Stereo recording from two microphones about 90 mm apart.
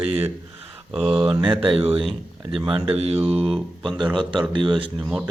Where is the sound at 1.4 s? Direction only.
70° right (ahead or behind); by 2.0 s 90° right.